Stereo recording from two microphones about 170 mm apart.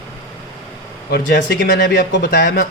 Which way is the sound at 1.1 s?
90° left.